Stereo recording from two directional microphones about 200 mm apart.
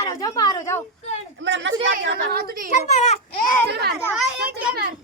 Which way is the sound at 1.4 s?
65° right (ahead or behind).